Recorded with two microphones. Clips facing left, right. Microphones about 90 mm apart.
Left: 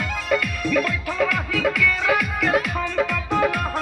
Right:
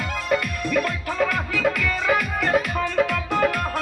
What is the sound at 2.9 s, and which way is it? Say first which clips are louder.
Music: even; 15° left (ahead or behind).